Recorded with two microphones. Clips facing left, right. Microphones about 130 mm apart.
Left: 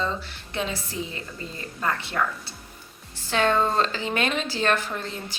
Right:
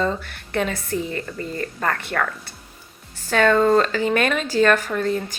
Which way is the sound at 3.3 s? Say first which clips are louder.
Right 6 dB; 45° right (ahead or behind).